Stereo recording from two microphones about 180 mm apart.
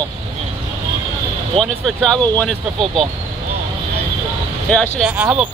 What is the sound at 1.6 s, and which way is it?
Speech, 5° left (ahead or behind).